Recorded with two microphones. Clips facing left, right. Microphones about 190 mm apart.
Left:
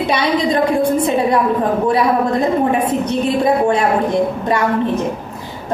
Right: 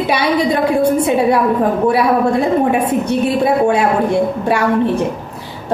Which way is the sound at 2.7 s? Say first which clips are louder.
Right 2 dB; 10° right (ahead or behind).